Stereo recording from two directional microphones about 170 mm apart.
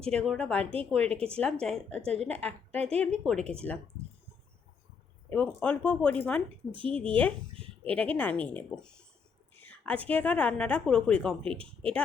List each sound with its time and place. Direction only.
0.0 s a woman's voice: 5° left (ahead or behind)
1.0 s speech: 35° right (ahead or behind)
1.6 s a woman's voice: 5° left (ahead or behind)
2.0 s speech: 35° right (ahead or behind)
3.0 s a woman's voice: 5° left (ahead or behind)
5.3 s a woman's voice: 10° left (ahead or behind)
6.7 s speech: 30° right (ahead or behind)
6.9 s a woman's voice: 10° left (ahead or behind)
11.5 s speech: 30° right (ahead or behind)